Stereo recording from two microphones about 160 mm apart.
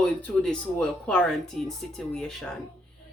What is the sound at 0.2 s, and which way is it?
Speech, 5° left (ahead or behind).